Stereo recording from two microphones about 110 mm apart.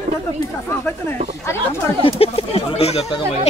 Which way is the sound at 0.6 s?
20° left (ahead or behind).